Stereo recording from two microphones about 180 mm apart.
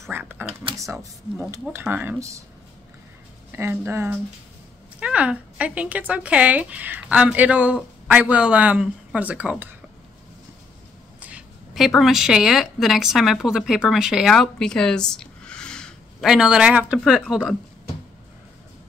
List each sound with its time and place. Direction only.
0.1 s a sound: 10° right (ahead or behind)
0.7 s speech: 15° right (ahead or behind)
3.5 s speech: 15° right (ahead or behind)
11.1 s a woman's voice: 5° right (ahead or behind)